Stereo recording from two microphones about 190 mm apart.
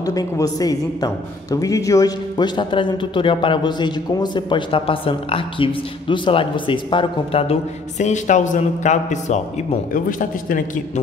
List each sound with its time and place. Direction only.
0.0 s speech: 20° left (ahead or behind)
8.0 s a man's voice: 40° left (ahead or behind)